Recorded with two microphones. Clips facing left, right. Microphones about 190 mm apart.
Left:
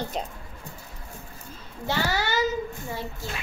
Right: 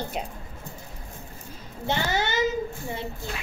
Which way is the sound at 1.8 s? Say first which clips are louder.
Even; 20° right (ahead or behind).